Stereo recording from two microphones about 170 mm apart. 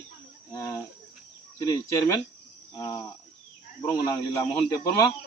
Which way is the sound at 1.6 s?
20° left (ahead or behind).